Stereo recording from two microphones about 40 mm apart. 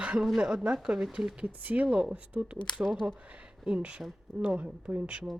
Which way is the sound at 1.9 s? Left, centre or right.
Right.